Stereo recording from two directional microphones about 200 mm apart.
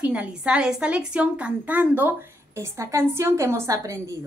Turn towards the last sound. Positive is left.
turn(degrees=-15)  # may be behind; listen again after turning